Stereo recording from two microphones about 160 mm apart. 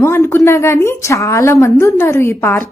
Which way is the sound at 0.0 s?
15° left (ahead or behind).